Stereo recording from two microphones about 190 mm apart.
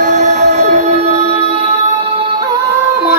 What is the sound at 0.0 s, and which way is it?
Train, 40° right (ahead or behind).